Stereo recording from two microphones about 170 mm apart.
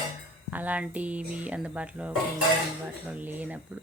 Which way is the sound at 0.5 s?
10° right (ahead or behind).